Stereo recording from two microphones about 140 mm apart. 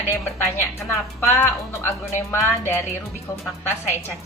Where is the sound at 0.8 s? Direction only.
15° left (ahead or behind).